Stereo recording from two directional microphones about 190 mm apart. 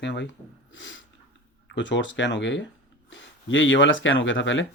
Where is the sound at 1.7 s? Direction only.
70° left (ahead or behind).